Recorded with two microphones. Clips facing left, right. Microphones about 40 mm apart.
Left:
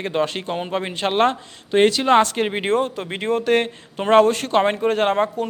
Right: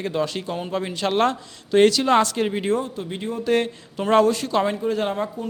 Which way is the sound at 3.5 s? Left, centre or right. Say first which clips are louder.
Left 2 dB; left.